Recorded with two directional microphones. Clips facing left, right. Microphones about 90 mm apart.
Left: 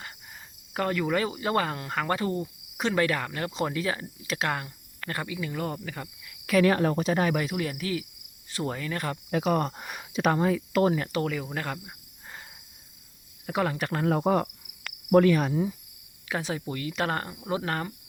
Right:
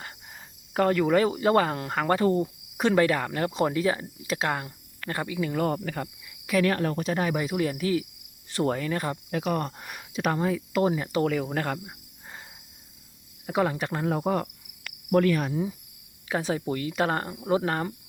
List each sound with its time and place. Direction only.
0.0 s cricket: 30° right (ahead or behind)
3.5 s speech: 25° right (ahead or behind)
5.0 s cricket: 25° right (ahead or behind); by 6.1 s 45° right (ahead or behind)
6.7 s speech: 10° left (ahead or behind)
7.5 s cricket: 30° right (ahead or behind)
8.5 s cricket: 45° right (ahead or behind)
8.8 s speech: 30° right (ahead or behind)
9.3 s speech: 5° left (ahead or behind)
11.1 s cricket: 35° right (ahead or behind)
13.4 s speech: 20° right (ahead or behind)
13.9 s speech: 5° right (ahead or behind)
16.3 s cricket: 35° right (ahead or behind)
17.0 s speech: 25° right (ahead or behind)